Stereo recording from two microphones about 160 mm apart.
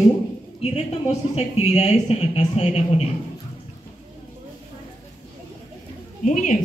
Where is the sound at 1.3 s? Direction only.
40° left (ahead or behind).